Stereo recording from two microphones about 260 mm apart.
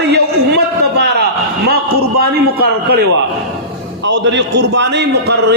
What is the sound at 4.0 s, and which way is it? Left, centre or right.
A man's voice, right.